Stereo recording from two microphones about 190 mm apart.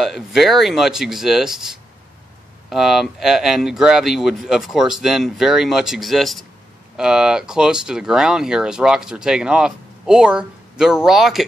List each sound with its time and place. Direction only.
0.0 s speech: centre (ahead or behind)